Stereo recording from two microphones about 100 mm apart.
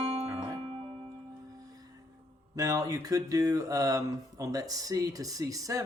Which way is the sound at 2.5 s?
40° right (ahead or behind).